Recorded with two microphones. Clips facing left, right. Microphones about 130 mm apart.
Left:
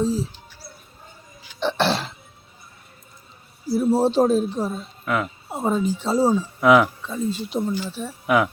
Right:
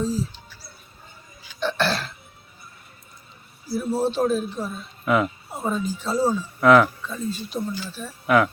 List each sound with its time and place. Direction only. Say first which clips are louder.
0.0 s speech: left 3 dB; 25° left (ahead or behind)
1.5 s speech: left 2 dB; 25° left (ahead or behind)
3.8 s a man's voice: left 5 dB; 35° left (ahead or behind)
5.0 s speech: right 4 dB; centre (ahead or behind)
5.5 s speech: left 4 dB; 25° left (ahead or behind)
6.6 s speech: right 1 dB; 10° left (ahead or behind)
7.0 s speech: left 4 dB; 20° left (ahead or behind)